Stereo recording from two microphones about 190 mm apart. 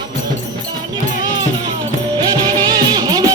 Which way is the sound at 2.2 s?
20° right (ahead or behind).